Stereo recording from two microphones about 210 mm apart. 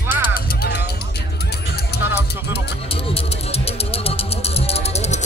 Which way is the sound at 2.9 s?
30° left (ahead or behind).